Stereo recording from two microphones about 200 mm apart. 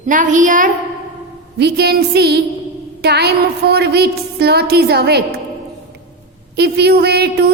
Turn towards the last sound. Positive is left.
turn(degrees=-55)  # may be behind; listen again after turning